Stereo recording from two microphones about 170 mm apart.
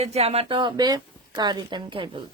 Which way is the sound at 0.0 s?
40° right (ahead or behind).